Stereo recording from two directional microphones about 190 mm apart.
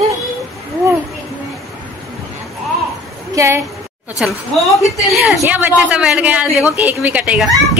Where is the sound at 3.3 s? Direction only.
15° right (ahead or behind).